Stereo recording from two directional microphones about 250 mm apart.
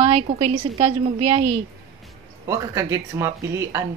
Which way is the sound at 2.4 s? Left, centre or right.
Centre.